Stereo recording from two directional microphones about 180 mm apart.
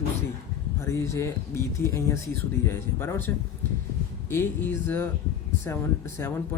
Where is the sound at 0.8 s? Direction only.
15° left (ahead or behind).